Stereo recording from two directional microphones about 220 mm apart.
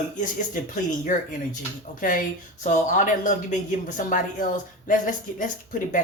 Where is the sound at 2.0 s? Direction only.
40° left (ahead or behind).